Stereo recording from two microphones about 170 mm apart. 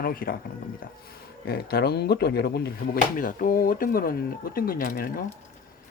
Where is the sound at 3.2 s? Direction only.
50° left (ahead or behind).